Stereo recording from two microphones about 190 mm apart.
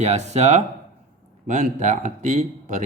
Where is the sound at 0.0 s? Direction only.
35° right (ahead or behind).